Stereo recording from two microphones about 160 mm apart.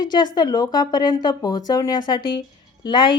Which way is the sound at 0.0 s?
30° left (ahead or behind).